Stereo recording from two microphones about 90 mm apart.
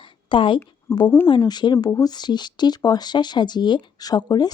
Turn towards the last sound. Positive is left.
turn(degrees=50)  # may be behind; listen again after turning